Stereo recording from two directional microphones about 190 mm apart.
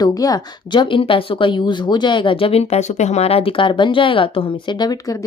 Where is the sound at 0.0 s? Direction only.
20° left (ahead or behind).